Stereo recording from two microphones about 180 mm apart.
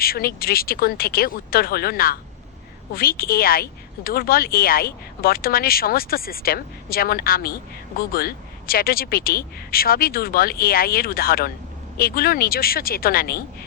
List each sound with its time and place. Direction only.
0.0 s speech: 55° left (ahead or behind)